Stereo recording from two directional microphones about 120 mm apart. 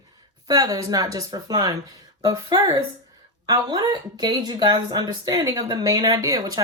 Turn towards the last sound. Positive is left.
turn(degrees=-35)  # may be behind; listen again after turning